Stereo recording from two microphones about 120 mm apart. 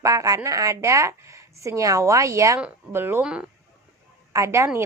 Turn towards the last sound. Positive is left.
turn(degrees=-25)  # may be behind; listen again after turning